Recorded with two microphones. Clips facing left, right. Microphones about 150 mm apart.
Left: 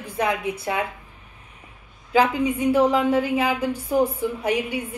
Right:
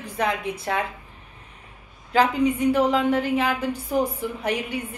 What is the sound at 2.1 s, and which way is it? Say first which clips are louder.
A woman's voice: even; 10° left (ahead or behind).